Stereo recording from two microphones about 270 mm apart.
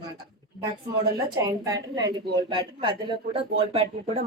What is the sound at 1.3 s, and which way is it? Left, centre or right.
A woman's voice, centre.